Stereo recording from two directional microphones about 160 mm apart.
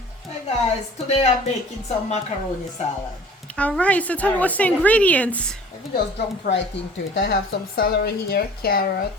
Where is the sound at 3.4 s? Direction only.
5° left (ahead or behind).